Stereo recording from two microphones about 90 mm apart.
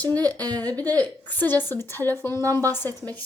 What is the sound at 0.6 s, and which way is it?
A woman's voice, 20° left (ahead or behind).